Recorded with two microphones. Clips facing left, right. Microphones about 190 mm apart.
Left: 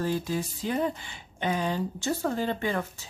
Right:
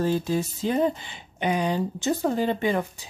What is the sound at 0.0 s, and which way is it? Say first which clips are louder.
Speech: right 5 dB; 25° right (ahead or behind).